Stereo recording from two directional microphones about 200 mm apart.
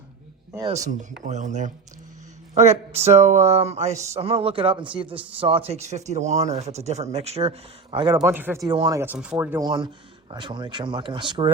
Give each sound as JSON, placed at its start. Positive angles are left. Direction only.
{"t": 0.7, "sound": "speech", "side_deg": -35}
{"t": 8.2, "sound": "speech", "side_deg": -10}
{"t": 8.6, "sound": "speech", "side_deg": -20}
{"t": 9.1, "sound": "speech", "side_deg": -5}
{"t": 9.6, "sound": "speech", "side_deg": -25}